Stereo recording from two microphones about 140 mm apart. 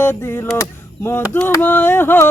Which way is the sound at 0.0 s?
15° left (ahead or behind).